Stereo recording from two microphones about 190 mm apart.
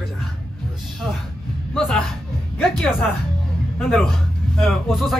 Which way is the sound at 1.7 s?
5° left (ahead or behind).